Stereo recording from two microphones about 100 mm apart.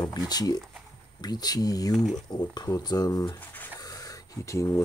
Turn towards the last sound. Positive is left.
turn(degrees=30)  # may be behind; listen again after turning